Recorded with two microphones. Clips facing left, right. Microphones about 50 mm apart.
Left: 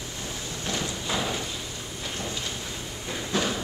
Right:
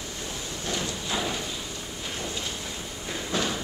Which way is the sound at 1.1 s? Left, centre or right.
Centre.